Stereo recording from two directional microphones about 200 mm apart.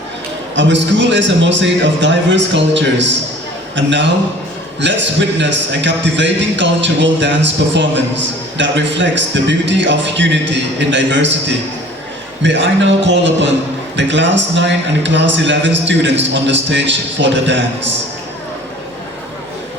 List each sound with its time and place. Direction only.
0.5 s a man's voice: 65° right (ahead or behind)